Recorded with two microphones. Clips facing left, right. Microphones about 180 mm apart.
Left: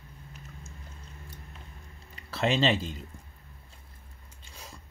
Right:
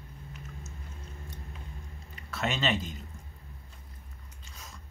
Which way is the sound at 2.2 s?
30° left (ahead or behind).